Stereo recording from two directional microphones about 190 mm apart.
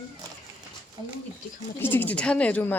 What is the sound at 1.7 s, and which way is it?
Speech, 10° left (ahead or behind).